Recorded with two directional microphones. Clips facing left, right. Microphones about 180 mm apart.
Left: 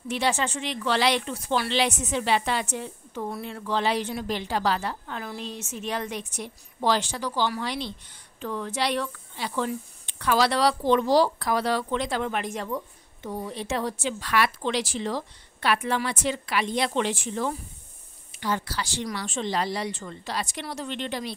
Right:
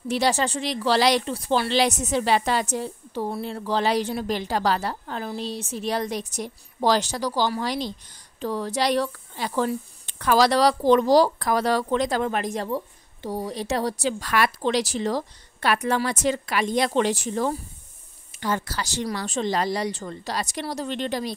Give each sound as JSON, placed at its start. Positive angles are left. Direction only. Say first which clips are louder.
{"t": 0.1, "sound": "speech", "louder": "right 3 dB", "side_deg": -40}